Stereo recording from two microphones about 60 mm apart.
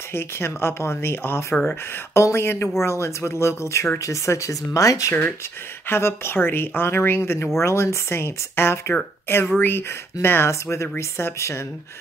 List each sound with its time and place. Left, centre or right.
0.1 s speech: left
5.9 s speech: left
10.5 s speech: left